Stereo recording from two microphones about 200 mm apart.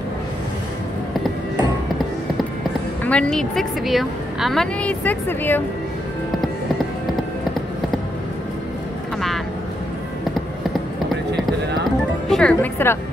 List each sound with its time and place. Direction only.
3.0 s a woman's voice: 5° left (ahead or behind)
12.3 s a woman's voice: 5° left (ahead or behind)